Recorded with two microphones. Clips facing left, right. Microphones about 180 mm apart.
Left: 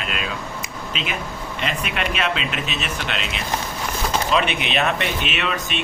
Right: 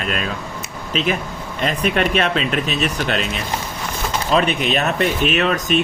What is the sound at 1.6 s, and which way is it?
Speech, 40° right (ahead or behind).